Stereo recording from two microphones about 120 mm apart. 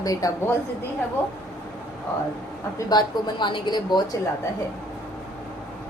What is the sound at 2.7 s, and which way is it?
A woman's voice, 35° left (ahead or behind).